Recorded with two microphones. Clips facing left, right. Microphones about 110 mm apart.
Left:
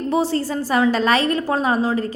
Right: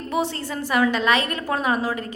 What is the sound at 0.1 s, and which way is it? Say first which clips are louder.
A woman's voice: left 4 dB; 35° left (ahead or behind).